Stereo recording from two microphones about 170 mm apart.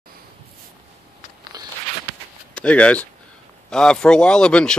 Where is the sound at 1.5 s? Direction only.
20° right (ahead or behind).